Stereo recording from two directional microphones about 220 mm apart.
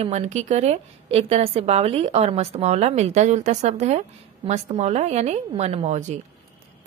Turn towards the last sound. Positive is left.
turn(degrees=-30)  # may be behind; listen again after turning